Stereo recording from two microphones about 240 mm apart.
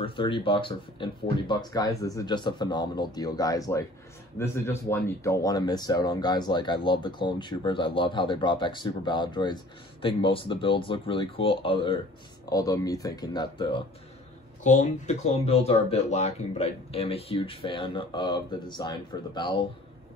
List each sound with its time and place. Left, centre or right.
0.0 s speech: left
14.6 s speech: left